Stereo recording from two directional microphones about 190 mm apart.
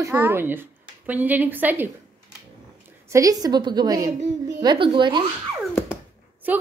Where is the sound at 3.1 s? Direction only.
15° right (ahead or behind).